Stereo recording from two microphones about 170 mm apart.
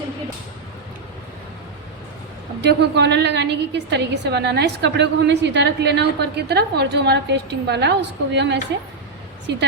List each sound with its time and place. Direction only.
2.6 s a woman's voice: 90° right